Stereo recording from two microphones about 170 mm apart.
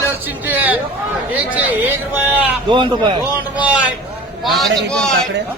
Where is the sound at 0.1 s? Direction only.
10° right (ahead or behind).